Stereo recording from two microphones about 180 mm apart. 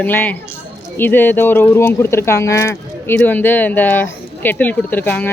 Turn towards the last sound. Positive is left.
turn(degrees=10)  # may be behind; listen again after turning